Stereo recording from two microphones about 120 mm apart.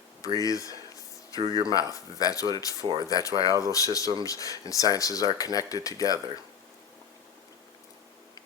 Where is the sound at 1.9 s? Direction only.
30° left (ahead or behind).